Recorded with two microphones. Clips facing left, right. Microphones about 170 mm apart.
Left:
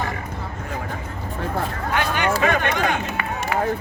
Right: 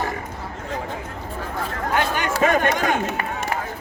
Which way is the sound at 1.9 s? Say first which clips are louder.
Left 1 dB; 45° right (ahead or behind).